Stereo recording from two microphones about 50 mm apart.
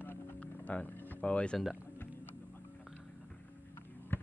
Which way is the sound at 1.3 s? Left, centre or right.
Left.